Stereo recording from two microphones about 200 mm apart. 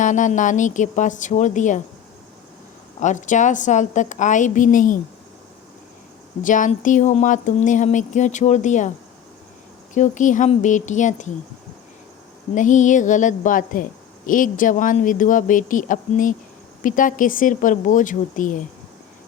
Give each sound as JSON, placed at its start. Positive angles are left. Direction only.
{"t": 0.0, "sound": "speech", "side_deg": 40}
{"t": 3.0, "sound": "speech", "side_deg": 40}
{"t": 6.4, "sound": "speech", "side_deg": 40}
{"t": 9.9, "sound": "speech", "side_deg": 40}
{"t": 12.5, "sound": "speech", "side_deg": 40}